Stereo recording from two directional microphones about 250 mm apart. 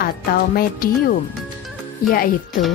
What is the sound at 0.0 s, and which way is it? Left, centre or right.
Speech, left.